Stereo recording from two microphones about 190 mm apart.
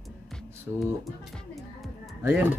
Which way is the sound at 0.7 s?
10° right (ahead or behind).